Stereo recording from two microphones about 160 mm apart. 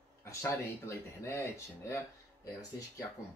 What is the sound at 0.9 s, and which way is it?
Speech, 15° left (ahead or behind).